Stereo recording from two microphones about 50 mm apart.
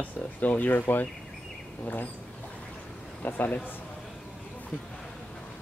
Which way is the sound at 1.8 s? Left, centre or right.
Left.